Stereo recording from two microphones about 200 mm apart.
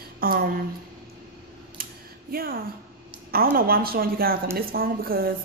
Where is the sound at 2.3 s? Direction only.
45° right (ahead or behind).